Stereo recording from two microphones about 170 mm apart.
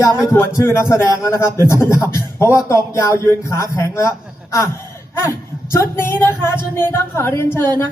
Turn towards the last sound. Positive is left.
turn(degrees=15)  # may be behind; listen again after turning